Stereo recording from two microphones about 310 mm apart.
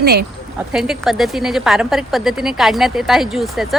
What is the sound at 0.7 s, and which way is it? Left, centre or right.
A woman's voice, centre.